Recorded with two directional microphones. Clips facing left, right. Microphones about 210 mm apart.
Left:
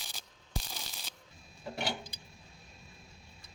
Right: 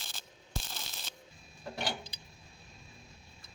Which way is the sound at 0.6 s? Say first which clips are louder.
Even; 10° left (ahead or behind).